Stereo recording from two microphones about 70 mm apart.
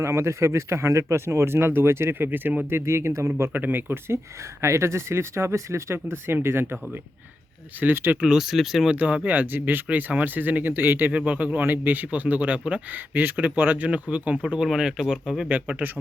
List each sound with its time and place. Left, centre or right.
0.0 s speech: right
2.6 s speech: right
3.5 s speech: right
4.6 s speech: right
7.8 s a man's voice: right
8.2 s speech: centre
9.0 s a man's voice: centre
15.4 s a man's voice: right